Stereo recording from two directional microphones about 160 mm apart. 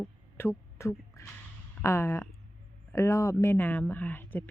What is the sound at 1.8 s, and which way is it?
Speech, 15° left (ahead or behind).